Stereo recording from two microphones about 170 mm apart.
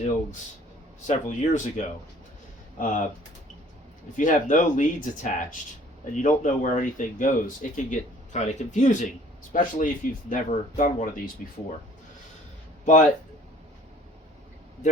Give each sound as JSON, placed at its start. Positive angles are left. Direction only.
{"t": 1.0, "sound": "speech", "side_deg": 45}
{"t": 4.2, "sound": "speech", "side_deg": 50}
{"t": 12.8, "sound": "speech", "side_deg": 45}